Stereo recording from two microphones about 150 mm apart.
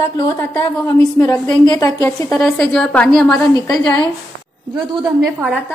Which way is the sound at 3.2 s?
20° left (ahead or behind).